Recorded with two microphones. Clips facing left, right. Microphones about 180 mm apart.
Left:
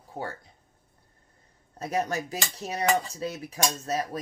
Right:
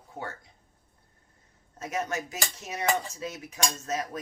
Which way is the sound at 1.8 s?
35° left (ahead or behind).